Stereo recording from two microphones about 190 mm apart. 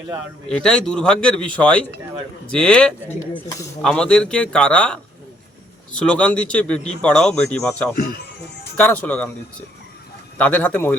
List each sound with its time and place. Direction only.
0.4 s a man's voice: 5° left (ahead or behind)
3.3 s speech: 20° left (ahead or behind)
3.8 s a man's voice: 5° left (ahead or behind)
10.3 s speech: 5° left (ahead or behind)